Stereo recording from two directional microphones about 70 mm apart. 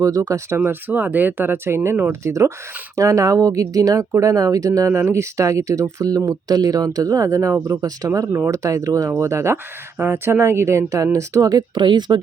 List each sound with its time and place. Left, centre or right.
0.0 s speech: right
0.6 s speech: right
2.2 s speech: right
4.9 s speech: right
9.1 s speech: right